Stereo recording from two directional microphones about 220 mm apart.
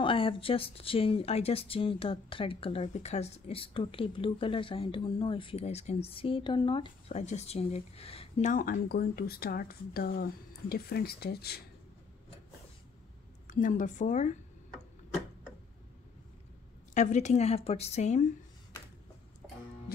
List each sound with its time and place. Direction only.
0.0 s speech: 25° left (ahead or behind); by 11.6 s 45° left (ahead or behind)
13.5 s a woman's voice: 35° left (ahead or behind)
16.9 s a woman's voice: 35° left (ahead or behind)